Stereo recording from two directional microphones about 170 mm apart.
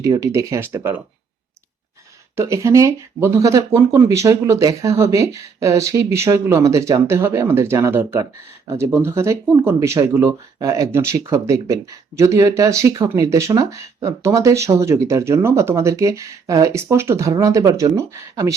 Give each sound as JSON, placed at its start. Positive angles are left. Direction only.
{"t": 0.0, "sound": "speech", "side_deg": -20}
{"t": 2.3, "sound": "speech", "side_deg": -15}